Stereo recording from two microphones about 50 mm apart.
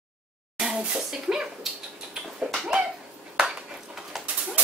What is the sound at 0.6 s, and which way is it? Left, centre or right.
Speech, centre.